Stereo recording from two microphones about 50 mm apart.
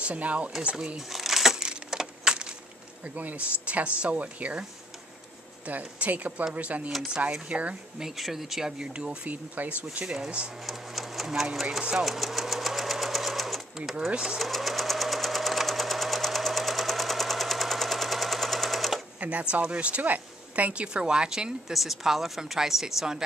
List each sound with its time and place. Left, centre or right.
0.0 s speech: right
0.6 s a sound: centre
1.9 s keys jangling: centre
3.2 s speech: right
5.7 s speech: right
8.0 s speech: centre
10.7 s sewing machine: centre
14.1 s speech: centre
14.4 s sewing machine: centre
19.1 s a sound: right
19.5 s speech: right